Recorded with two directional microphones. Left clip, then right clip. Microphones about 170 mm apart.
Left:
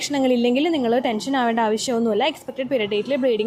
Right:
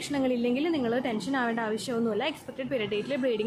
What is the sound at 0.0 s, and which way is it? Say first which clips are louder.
A woman's voice: left 9 dB; 35° left (ahead or behind).